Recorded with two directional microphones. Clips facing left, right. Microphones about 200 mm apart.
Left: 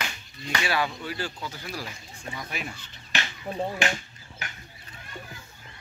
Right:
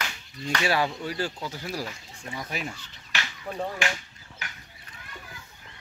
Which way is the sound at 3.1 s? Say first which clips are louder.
Left 2 dB; 20° left (ahead or behind).